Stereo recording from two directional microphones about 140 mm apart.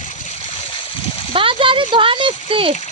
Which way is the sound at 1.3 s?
40° right (ahead or behind).